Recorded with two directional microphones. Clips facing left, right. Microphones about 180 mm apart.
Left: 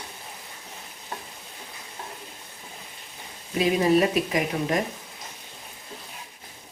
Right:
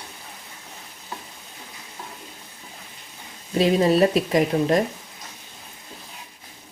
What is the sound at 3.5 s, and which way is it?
Speech, 35° right (ahead or behind).